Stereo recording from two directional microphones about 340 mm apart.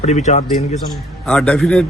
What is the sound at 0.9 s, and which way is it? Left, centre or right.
Speech, centre.